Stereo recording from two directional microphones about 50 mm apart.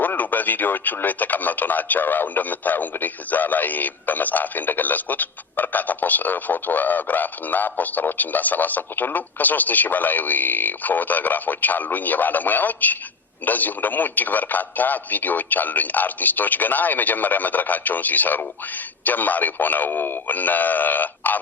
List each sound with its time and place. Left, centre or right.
0.0 s speech: left